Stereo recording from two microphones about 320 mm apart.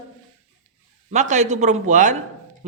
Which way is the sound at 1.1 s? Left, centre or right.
Right.